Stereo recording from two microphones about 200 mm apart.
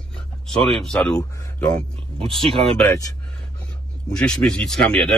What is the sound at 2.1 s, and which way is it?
Speech, 25° right (ahead or behind).